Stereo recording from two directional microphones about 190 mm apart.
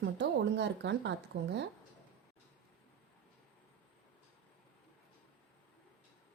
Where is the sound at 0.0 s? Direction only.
65° right (ahead or behind).